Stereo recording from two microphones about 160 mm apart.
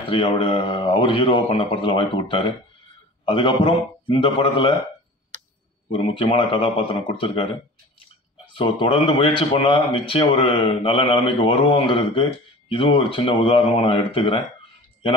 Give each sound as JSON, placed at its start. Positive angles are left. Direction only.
{"t": 0.1, "sound": "speech", "side_deg": 35}
{"t": 5.9, "sound": "speech", "side_deg": 35}
{"t": 8.5, "sound": "speech", "side_deg": 30}